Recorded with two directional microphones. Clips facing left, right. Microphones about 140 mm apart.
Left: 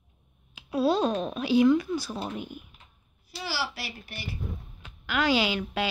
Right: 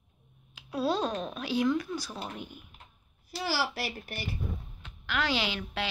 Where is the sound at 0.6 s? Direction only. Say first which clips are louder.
Left 5 dB; 5° left (ahead or behind).